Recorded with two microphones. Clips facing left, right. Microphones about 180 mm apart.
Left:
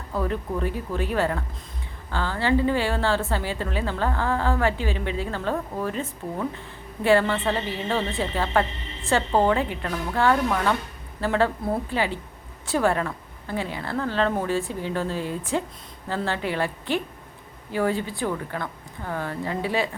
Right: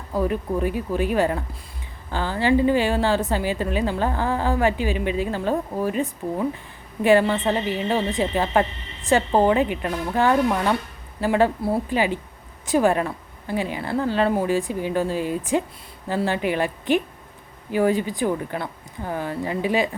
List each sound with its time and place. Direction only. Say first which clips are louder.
0.1 s a woman's voice: right 4 dB; 15° right (ahead or behind)